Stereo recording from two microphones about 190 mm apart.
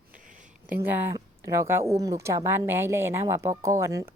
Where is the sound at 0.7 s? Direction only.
10° right (ahead or behind).